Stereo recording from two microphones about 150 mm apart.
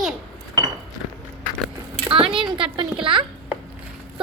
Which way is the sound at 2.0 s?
35° right (ahead or behind).